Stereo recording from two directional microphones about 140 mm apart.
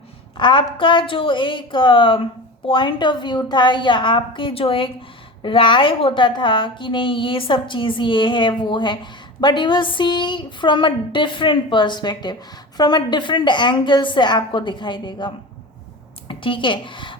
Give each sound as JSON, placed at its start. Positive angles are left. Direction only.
{"t": 0.3, "sound": "a woman's voice", "side_deg": 35}
{"t": 16.3, "sound": "a woman's voice", "side_deg": 35}